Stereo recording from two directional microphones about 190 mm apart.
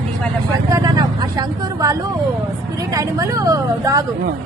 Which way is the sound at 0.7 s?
20° right (ahead or behind).